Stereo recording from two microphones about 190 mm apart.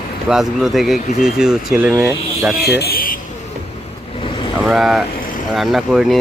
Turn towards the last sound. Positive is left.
turn(degrees=0)  # may be behind; listen again after turning